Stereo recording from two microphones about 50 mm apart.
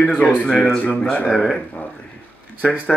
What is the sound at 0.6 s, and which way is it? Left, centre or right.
Speech, left.